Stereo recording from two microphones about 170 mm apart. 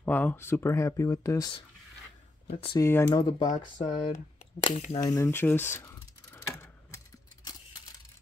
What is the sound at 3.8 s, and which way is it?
Speech, 30° left (ahead or behind).